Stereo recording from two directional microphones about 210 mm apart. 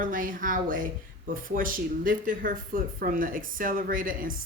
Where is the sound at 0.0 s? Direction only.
40° right (ahead or behind).